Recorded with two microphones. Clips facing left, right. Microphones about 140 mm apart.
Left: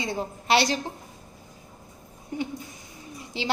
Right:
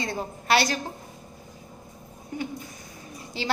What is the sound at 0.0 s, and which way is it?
Speech, 20° left (ahead or behind).